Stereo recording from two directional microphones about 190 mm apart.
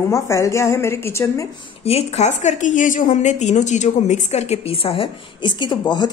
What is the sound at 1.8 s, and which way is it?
A woman's voice, 30° left (ahead or behind).